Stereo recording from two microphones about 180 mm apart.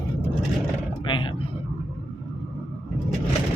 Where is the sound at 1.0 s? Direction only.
25° left (ahead or behind).